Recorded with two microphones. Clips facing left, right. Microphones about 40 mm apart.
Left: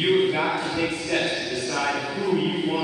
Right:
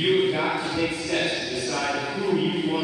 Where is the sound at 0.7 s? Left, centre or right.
Centre.